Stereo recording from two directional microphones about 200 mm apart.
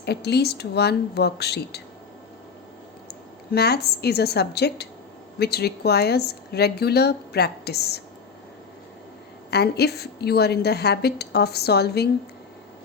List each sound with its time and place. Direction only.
0.0 s speech: 55° left (ahead or behind)
3.1 s a woman's voice: 55° left (ahead or behind)
9.5 s speech: 55° left (ahead or behind)